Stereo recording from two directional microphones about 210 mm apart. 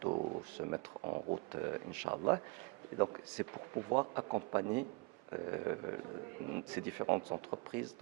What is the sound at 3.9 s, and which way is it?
Speech, 25° right (ahead or behind).